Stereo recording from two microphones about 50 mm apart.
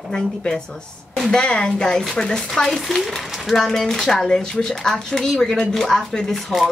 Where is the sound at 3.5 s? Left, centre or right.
Centre.